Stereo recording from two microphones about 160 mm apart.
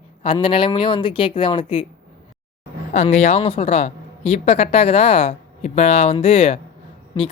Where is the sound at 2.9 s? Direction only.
45° left (ahead or behind).